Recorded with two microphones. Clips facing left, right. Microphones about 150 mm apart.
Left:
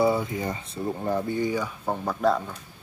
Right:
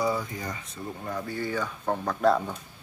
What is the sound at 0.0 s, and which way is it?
Speech, 25° left (ahead or behind).